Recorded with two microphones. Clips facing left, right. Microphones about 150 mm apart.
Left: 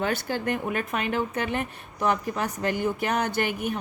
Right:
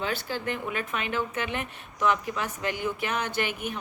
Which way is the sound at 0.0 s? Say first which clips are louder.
Left 4 dB; 50° left (ahead or behind).